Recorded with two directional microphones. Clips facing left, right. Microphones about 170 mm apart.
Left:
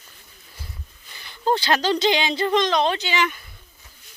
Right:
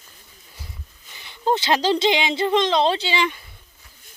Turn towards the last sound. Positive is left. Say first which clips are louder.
# right 1 dB
turn(degrees=-30)  # may be behind; listen again after turning